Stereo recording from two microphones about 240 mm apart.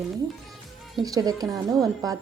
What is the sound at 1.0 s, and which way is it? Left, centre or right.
A woman's voice, centre.